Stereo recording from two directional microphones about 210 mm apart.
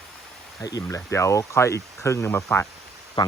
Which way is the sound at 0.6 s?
15° left (ahead or behind).